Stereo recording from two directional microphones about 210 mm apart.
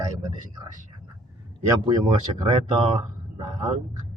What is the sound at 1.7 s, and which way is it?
Speech, 20° right (ahead or behind).